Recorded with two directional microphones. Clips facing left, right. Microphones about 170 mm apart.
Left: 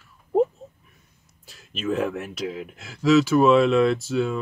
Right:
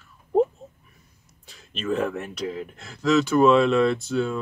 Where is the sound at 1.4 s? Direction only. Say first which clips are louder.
Left 2 dB; 5° left (ahead or behind).